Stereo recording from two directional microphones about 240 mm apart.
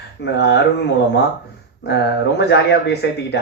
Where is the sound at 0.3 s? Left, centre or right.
Left.